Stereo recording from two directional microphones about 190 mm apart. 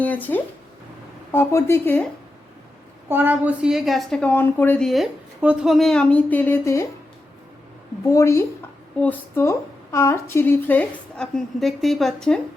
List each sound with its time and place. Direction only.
0.0 s a woman's voice: 10° left (ahead or behind)
3.1 s a woman's voice: 10° right (ahead or behind); by 6.8 s 15° left (ahead or behind)
8.0 s a woman's voice: 15° left (ahead or behind)